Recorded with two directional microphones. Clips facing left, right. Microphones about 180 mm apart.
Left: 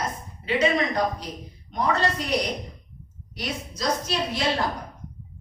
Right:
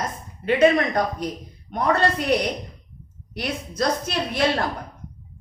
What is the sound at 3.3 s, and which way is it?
A woman's voice, 60° right (ahead or behind).